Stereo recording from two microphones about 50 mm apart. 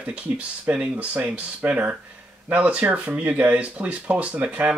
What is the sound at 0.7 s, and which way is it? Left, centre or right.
Speech, right.